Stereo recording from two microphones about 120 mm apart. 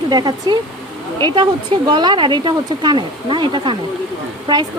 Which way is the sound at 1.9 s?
40° right (ahead or behind).